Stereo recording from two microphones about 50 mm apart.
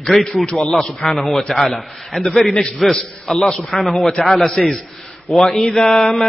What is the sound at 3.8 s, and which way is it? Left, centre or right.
Mantra, centre.